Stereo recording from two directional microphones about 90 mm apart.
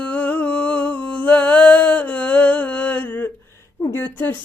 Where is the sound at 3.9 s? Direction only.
25° left (ahead or behind).